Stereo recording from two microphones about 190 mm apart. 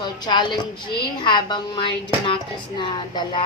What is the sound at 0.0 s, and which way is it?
A woman's voice, 25° left (ahead or behind).